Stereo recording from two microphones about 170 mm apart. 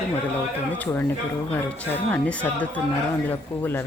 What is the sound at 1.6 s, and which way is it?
A woman's voice, 10° left (ahead or behind).